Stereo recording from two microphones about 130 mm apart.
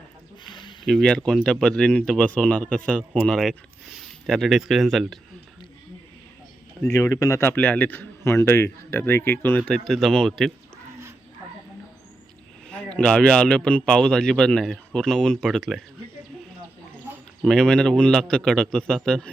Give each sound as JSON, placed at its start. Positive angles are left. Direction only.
{"t": 0.4, "sound": "a sound", "side_deg": 35}
{"t": 0.9, "sound": "a man's voice", "side_deg": 5}
{"t": 6.9, "sound": "a man's voice", "side_deg": 20}
{"t": 12.6, "sound": "a man's voice", "side_deg": 10}
{"t": 17.4, "sound": "a man's voice", "side_deg": 5}